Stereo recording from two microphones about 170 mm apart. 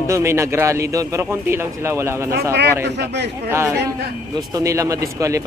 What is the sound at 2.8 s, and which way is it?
Speech, 90° right.